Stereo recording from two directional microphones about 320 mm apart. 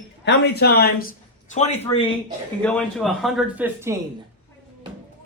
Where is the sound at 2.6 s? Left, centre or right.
Centre.